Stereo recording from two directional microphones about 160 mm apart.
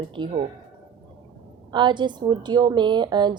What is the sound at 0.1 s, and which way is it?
Speech, 30° right (ahead or behind).